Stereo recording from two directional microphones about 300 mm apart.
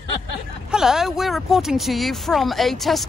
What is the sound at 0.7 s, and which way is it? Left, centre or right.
Speech, centre.